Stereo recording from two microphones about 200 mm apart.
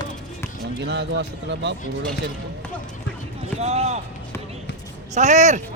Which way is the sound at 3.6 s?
30° right (ahead or behind).